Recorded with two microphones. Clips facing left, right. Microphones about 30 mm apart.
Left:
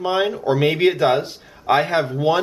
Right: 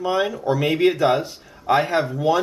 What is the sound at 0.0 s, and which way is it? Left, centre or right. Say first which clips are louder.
Speech: left 2 dB; left.